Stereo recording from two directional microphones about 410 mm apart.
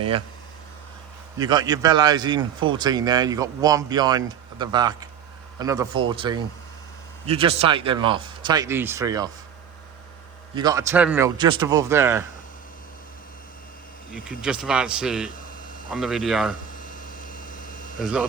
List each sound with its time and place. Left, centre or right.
1.4 s speech: centre
10.5 s speech: centre
14.3 s speech: centre
16.7 s a sound: centre
18.0 s speech: centre